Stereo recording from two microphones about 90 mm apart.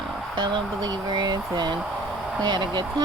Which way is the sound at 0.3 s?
60° right (ahead or behind).